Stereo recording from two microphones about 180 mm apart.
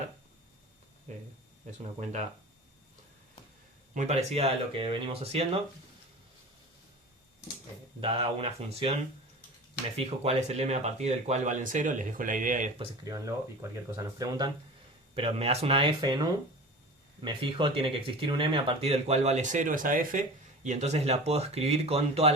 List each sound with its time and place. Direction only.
3.9 s speech: 40° right (ahead or behind)
8.0 s speech: 30° right (ahead or behind)
10.0 s speech: 35° right (ahead or behind)
12.8 s speech: 20° right (ahead or behind)
15.1 s speech: 30° right (ahead or behind); by 20.2 s 50° right (ahead or behind)
20.7 s speech: 40° right (ahead or behind)